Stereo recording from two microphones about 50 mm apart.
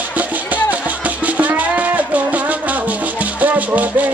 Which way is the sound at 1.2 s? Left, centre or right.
Right.